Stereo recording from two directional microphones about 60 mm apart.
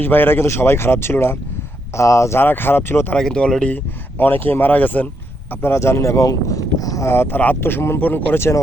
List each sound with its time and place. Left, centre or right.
0.0 s speech: left
2.0 s speech: left
2.4 s speech: left
3.2 s speech: centre
4.2 s speech: left
5.6 s speech: left
7.0 s speech: left